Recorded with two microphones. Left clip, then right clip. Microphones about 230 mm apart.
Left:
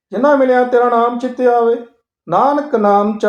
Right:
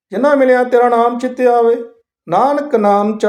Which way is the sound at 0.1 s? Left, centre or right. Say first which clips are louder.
Right 1 dB; right.